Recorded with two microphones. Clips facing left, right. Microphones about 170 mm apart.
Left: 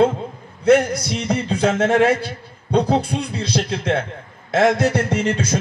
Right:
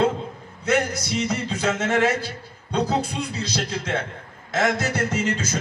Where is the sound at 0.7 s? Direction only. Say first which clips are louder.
Left 8 dB; 60° left (ahead or behind).